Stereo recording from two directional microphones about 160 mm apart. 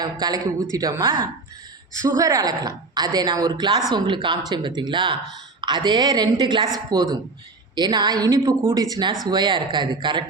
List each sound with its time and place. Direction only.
0.0 s a woman's voice: 25° right (ahead or behind)